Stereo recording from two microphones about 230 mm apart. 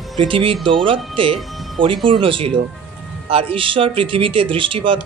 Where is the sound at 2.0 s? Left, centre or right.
Right.